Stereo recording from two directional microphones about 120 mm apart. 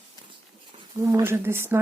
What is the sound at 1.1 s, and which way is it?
Speech, 20° right (ahead or behind).